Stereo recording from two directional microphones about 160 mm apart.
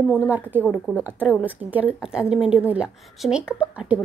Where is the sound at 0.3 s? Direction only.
10° right (ahead or behind).